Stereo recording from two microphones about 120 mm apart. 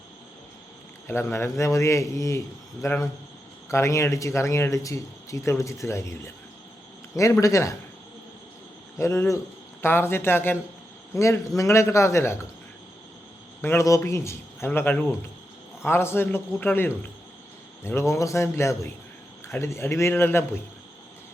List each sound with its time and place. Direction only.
1.0 s speech: 20° left (ahead or behind)
9.0 s speech: 25° left (ahead or behind)
13.6 s speech: 20° left (ahead or behind)